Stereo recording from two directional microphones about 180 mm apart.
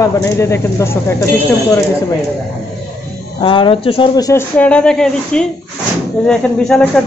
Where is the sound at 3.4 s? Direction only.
30° left (ahead or behind); by 7.0 s 5° left (ahead or behind).